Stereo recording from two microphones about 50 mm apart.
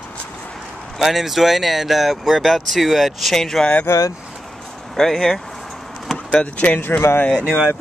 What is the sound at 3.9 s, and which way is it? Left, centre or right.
Speech, left.